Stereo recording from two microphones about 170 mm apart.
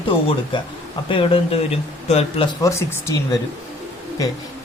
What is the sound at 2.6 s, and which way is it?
Speech, 15° left (ahead or behind).